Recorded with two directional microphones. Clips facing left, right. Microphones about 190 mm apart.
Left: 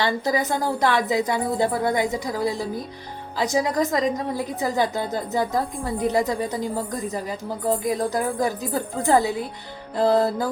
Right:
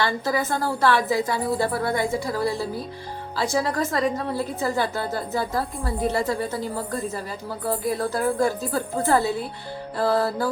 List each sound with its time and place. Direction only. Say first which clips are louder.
0.0 s a woman's voice: left 1 dB; 20° left (ahead or behind)
10.0 s music: left 3 dB; 20° left (ahead or behind)